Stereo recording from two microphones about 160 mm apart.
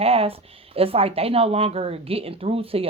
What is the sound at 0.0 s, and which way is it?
Speech, 35° right (ahead or behind).